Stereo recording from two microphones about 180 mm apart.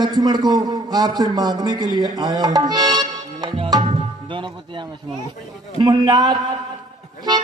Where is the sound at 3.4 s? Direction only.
25° right (ahead or behind).